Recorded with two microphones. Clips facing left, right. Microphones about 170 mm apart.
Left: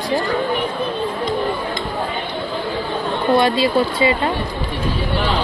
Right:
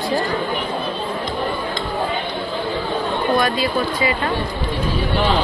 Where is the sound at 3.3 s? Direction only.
25° left (ahead or behind).